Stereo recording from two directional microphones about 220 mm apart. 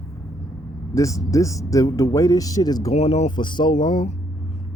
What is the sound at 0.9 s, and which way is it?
Speech, 15° left (ahead or behind).